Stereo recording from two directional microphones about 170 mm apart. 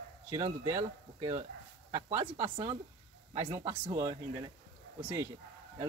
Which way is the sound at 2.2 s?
30° right (ahead or behind).